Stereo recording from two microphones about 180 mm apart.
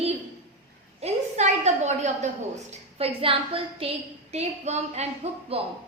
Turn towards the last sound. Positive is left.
turn(degrees=-35)  # may be behind; listen again after turning